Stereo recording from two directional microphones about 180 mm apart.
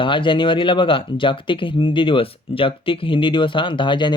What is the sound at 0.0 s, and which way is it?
Speech, 30° left (ahead or behind).